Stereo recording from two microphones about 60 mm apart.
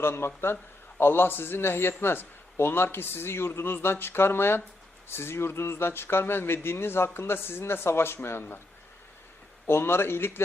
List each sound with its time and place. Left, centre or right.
0.0 s a man's voice: left
9.6 s a man's voice: left